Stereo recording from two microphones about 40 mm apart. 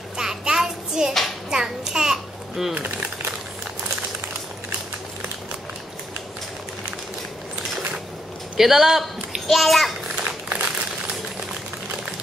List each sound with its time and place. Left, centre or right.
0.2 s child singing: centre
1.5 s babbling: centre
2.7 s a sound: right
8.5 s a woman's voice: centre
9.5 s a child's voice: centre
10.1 s a sound: right